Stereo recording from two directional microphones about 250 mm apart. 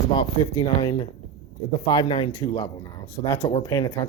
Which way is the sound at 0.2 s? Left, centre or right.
Centre.